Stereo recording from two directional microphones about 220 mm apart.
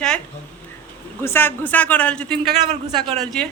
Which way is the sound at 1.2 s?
10° left (ahead or behind).